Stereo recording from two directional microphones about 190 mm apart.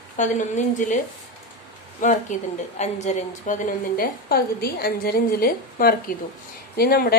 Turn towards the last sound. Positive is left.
turn(degrees=55)  # may be behind; listen again after turning